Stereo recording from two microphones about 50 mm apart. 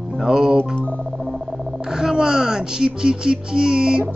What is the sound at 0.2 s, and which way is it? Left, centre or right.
Speech, centre.